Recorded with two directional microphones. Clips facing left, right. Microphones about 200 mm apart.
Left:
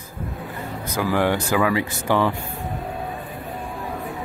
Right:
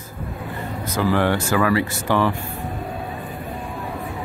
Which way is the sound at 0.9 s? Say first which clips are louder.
Right 1 dB; 15° left (ahead or behind).